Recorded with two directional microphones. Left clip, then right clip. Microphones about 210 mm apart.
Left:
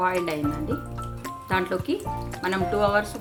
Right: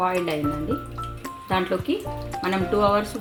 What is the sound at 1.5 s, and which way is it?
A woman's voice, 15° right (ahead or behind).